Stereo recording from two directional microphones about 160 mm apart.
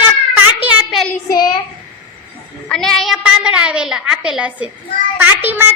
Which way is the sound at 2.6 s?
5° left (ahead or behind).